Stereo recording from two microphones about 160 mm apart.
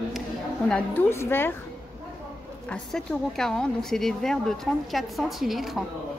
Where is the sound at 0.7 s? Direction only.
10° left (ahead or behind).